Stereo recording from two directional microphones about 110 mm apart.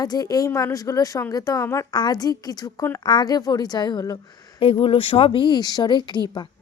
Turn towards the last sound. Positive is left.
turn(degrees=45)  # may be behind; listen again after turning